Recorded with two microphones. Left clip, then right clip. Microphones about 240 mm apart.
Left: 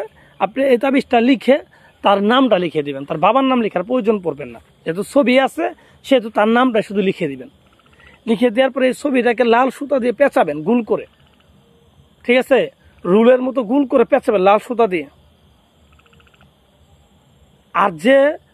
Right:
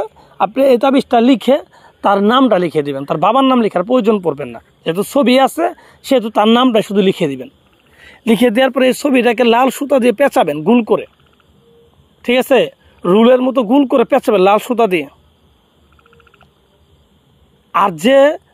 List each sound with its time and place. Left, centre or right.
0.0 s speech: right
12.2 s speech: right
17.6 s speech: right